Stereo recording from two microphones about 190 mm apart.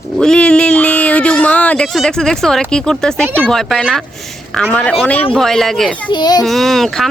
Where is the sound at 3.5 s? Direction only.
Centre (ahead or behind).